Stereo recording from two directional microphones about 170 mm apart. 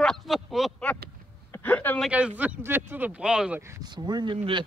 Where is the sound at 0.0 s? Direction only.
Centre (ahead or behind).